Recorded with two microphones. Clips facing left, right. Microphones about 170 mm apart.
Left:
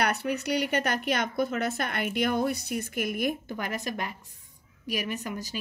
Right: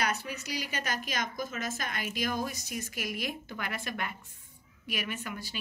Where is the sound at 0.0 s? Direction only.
65° left (ahead or behind).